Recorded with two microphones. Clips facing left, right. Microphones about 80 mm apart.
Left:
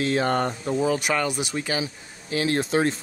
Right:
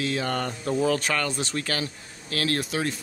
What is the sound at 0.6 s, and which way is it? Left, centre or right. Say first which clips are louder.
Speech: left 1 dB; centre.